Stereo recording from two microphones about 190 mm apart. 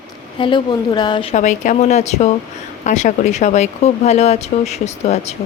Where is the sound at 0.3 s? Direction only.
25° left (ahead or behind).